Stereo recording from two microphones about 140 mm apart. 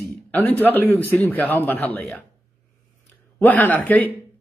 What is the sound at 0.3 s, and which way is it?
A man's voice, 10° left (ahead or behind).